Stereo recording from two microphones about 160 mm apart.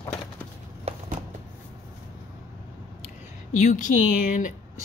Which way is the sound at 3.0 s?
50° left (ahead or behind).